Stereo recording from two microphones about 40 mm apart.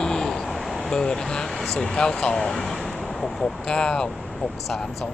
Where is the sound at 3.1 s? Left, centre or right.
Centre.